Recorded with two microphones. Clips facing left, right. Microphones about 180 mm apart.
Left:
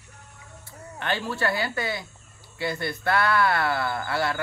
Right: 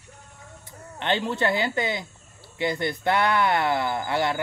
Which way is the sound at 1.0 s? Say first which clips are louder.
Right 3 dB; 20° right (ahead or behind).